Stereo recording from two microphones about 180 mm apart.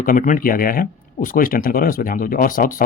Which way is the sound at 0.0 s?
50° left (ahead or behind).